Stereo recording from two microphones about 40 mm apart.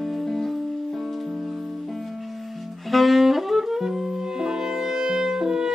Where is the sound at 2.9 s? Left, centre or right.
Centre.